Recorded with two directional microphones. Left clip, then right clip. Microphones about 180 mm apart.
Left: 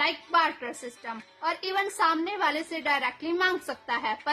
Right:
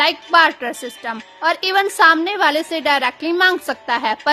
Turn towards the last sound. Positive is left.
turn(degrees=-40)  # may be behind; listen again after turning